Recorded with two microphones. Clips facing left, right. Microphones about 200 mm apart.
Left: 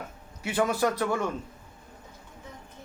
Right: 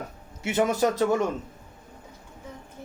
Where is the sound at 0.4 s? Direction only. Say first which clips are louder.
Right 3 dB; 25° right (ahead or behind).